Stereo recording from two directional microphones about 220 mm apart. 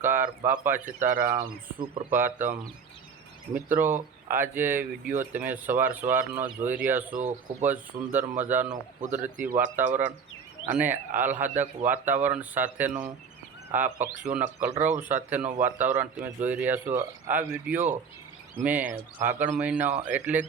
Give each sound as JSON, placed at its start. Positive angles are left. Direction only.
{"t": 0.2, "sound": "speech", "side_deg": -40}
{"t": 0.6, "sound": "speech", "side_deg": -10}
{"t": 3.5, "sound": "speech", "side_deg": -10}
{"t": 18.9, "sound": "speech", "side_deg": -35}
{"t": 19.4, "sound": "speech", "side_deg": -5}